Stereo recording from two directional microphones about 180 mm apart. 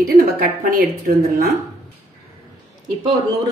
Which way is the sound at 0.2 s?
55° right (ahead or behind).